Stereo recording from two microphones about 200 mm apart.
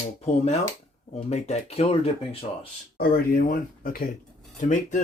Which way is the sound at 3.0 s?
50° left (ahead or behind).